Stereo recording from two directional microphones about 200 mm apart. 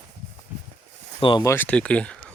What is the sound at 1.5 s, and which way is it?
Speech, 10° left (ahead or behind).